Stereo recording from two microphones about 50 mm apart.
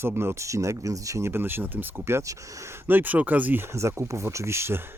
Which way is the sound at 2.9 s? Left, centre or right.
Right.